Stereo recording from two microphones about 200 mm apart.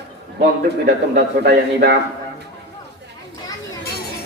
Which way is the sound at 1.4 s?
55° right (ahead or behind).